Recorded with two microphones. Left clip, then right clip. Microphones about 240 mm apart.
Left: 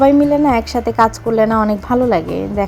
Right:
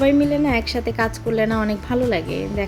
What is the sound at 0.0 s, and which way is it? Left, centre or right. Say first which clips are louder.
A woman's voice: left 6 dB; centre.